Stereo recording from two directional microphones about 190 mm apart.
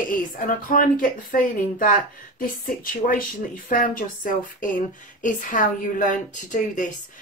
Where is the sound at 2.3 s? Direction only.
50° left (ahead or behind).